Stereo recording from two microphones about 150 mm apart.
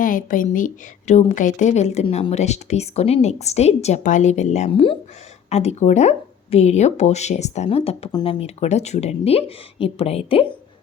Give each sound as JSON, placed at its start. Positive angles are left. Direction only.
{"t": 0.0, "sound": "a woman's voice", "side_deg": 65}
{"t": 4.7, "sound": "a woman's voice", "side_deg": 35}